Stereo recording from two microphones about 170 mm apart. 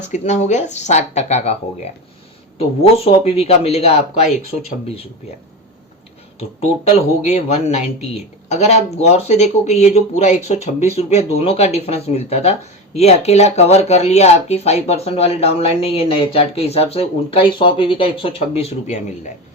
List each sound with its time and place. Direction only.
0.1 s speech: 45° left (ahead or behind)
6.8 s speech: 40° left (ahead or behind)